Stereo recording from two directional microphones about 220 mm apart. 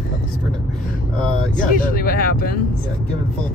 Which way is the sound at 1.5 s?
35° left (ahead or behind).